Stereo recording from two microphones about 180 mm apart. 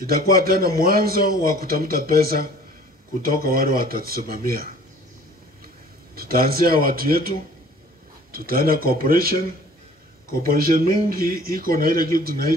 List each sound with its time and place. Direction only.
0.0 s speech: 55° right (ahead or behind)
6.1 s speech: 55° right (ahead or behind)
8.3 s a man's voice: 55° right (ahead or behind)